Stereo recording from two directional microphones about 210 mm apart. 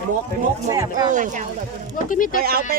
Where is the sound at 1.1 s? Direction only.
35° right (ahead or behind).